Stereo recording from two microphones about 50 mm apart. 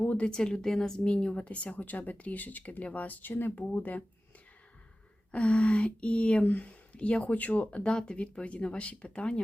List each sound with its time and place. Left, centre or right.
0.0 s a sound: left
0.3 s a woman's voice: centre; by 4.0 s left
5.3 s speech: left
7.9 s a woman's voice: centre